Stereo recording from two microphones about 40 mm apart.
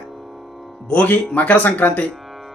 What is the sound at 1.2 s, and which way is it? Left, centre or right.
Speech, left.